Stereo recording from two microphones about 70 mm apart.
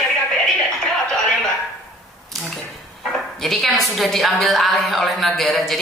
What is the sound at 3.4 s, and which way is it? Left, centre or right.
A woman's voice, centre.